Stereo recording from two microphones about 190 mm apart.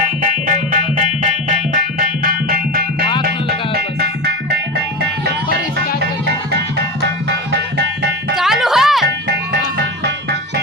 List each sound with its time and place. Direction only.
0.2 s music: 45° right (ahead or behind)
8.4 s music: centre (ahead or behind)